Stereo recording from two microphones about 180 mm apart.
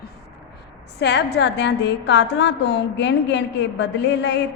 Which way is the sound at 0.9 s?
70° left (ahead or behind).